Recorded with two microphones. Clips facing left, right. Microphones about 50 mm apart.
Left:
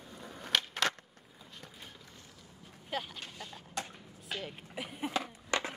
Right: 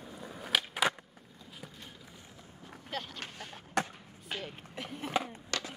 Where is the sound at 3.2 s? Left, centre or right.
Right.